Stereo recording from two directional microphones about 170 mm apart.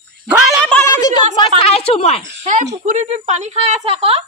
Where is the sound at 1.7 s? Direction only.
35° left (ahead or behind).